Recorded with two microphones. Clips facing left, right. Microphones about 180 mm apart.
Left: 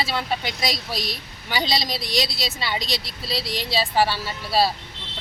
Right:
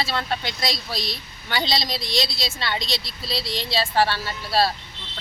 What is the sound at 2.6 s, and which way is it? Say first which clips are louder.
Speech: even; 10° left (ahead or behind).